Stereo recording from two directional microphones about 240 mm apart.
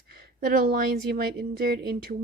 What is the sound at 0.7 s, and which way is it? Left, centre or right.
A woman's voice, right.